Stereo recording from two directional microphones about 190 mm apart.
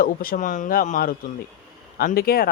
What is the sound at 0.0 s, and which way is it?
Speech, 50° left (ahead or behind).